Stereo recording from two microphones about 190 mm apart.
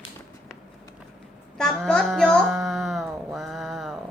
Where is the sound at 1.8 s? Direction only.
Centre (ahead or behind).